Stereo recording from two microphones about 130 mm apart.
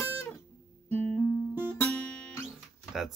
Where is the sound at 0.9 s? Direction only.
10° left (ahead or behind).